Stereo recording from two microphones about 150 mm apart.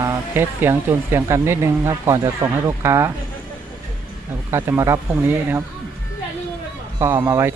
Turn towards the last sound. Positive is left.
turn(degrees=-15)  # may be behind; listen again after turning